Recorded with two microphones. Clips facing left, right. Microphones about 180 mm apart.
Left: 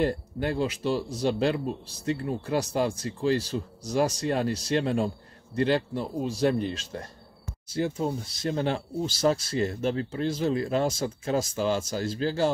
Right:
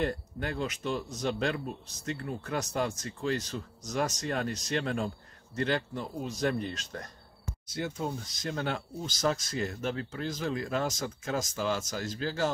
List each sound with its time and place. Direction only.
0.0 s speech: 30° left (ahead or behind)